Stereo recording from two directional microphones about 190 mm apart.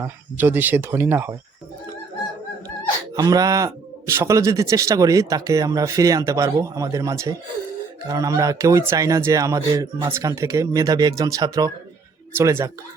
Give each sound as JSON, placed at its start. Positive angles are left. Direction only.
{"t": 0.0, "sound": "a man's voice", "side_deg": -10}
{"t": 3.2, "sound": "a man's voice", "side_deg": -20}